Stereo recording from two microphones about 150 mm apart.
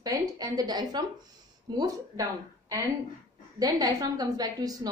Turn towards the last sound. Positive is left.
turn(degrees=-25)  # may be behind; listen again after turning